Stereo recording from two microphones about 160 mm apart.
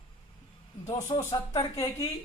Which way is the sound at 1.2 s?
20° left (ahead or behind).